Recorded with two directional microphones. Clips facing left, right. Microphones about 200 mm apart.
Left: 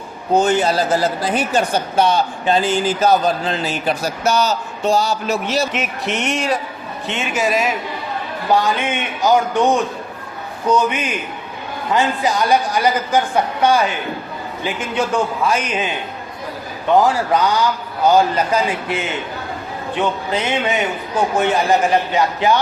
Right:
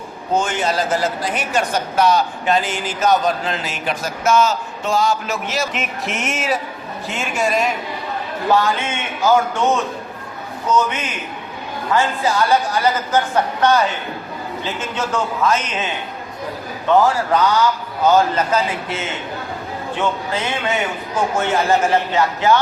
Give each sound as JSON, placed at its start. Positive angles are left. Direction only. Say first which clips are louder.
{"t": 0.3, "sound": "speech", "louder": "left 4 dB", "side_deg": 35}
{"t": 5.7, "sound": "a sound", "louder": "left 3 dB", "side_deg": 0}
{"t": 8.5, "sound": "a man's voice", "louder": "left 2 dB", "side_deg": 15}
{"t": 11.9, "sound": "a man's voice", "louder": "even", "side_deg": 15}
{"t": 16.9, "sound": "a man's voice", "louder": "left 1 dB", "side_deg": 15}
{"t": 20.0, "sound": "a man's voice", "louder": "left 2 dB", "side_deg": 20}